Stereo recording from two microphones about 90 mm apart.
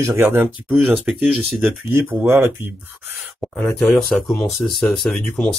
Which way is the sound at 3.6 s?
5° left (ahead or behind).